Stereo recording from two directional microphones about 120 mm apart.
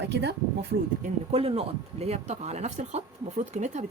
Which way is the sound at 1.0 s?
55° right (ahead or behind).